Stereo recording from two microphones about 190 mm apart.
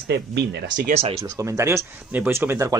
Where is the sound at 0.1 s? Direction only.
65° right (ahead or behind).